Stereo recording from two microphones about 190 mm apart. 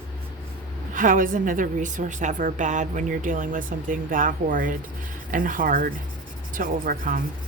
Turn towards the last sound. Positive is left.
turn(degrees=-45)  # may be behind; listen again after turning